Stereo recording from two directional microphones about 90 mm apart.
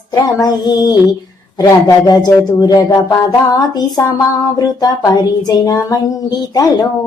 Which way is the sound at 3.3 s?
40° left (ahead or behind).